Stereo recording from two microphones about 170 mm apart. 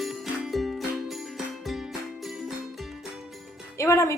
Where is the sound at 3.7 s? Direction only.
15° left (ahead or behind).